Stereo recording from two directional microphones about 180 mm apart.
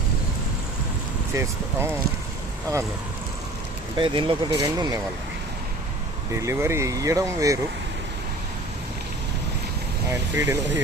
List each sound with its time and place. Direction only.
1.3 s speech: 15° right (ahead or behind)
3.9 s speech: 25° right (ahead or behind)
6.3 s speech: 15° right (ahead or behind)
10.1 s speech: 15° right (ahead or behind)